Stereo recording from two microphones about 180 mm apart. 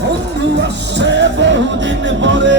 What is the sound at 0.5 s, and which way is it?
Music, 75° right (ahead or behind).